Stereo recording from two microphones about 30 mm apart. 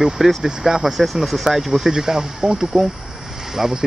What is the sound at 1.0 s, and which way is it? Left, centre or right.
Speech, centre.